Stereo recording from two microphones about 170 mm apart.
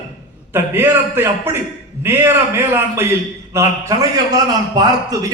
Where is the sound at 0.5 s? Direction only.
15° right (ahead or behind).